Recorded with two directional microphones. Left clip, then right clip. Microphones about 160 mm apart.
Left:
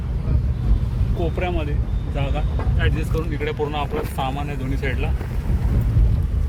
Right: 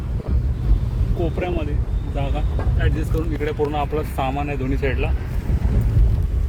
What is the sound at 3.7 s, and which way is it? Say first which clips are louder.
Speech: right 2 dB; 60° right (ahead or behind).